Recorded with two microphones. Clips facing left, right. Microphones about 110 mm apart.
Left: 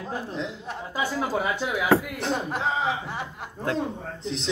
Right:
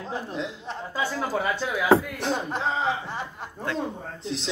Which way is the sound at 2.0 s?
Centre (ahead or behind).